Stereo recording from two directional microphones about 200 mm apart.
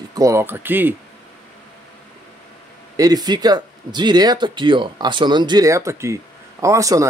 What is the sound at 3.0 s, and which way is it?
Speech, 20° right (ahead or behind).